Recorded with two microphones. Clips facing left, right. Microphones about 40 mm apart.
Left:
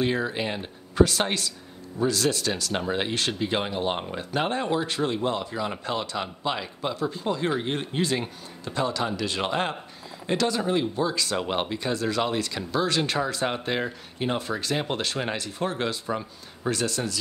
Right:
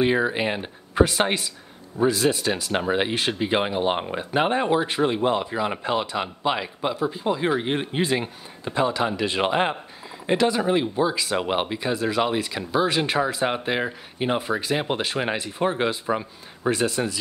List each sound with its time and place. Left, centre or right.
0.0 s speech: right